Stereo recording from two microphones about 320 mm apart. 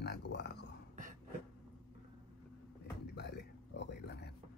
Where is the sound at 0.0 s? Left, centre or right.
Left.